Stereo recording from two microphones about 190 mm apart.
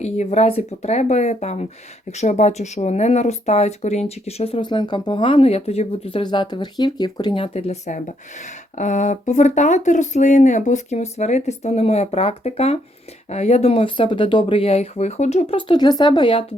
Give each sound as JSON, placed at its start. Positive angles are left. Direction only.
{"t": 0.0, "sound": "speech", "side_deg": 35}